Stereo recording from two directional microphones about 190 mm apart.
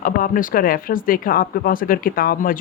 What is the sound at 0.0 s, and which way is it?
Speech, 45° left (ahead or behind).